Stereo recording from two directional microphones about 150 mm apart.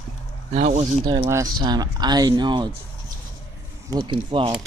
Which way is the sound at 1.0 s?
30° right (ahead or behind).